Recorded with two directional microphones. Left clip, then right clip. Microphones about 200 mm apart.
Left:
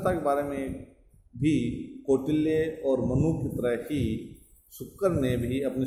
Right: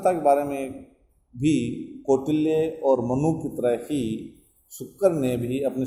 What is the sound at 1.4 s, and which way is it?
A man's voice, 25° right (ahead or behind).